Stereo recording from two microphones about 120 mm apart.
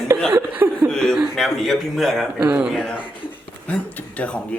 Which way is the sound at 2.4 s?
15° right (ahead or behind).